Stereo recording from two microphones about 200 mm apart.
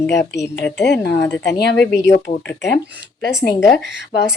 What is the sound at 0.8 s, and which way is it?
Speech, 55° left (ahead or behind).